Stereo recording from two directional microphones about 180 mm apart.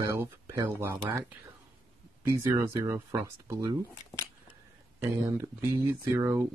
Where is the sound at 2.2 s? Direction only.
15° right (ahead or behind).